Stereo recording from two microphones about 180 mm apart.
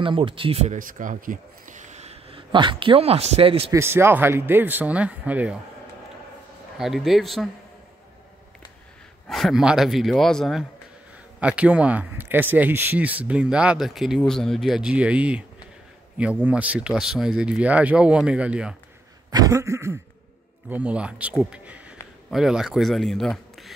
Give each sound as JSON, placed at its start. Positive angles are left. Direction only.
{"t": 0.0, "sound": "speech", "side_deg": -30}
{"t": 0.7, "sound": "a man's voice", "side_deg": -50}
{"t": 3.7, "sound": "speech", "side_deg": -15}
{"t": 6.8, "sound": "speech", "side_deg": 0}
{"t": 9.3, "sound": "speech", "side_deg": 0}
{"t": 19.3, "sound": "speech", "side_deg": -20}